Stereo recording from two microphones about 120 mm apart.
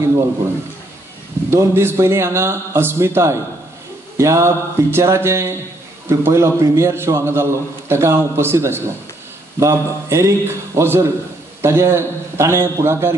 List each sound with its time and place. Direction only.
1.5 s a man's voice: 20° right (ahead or behind)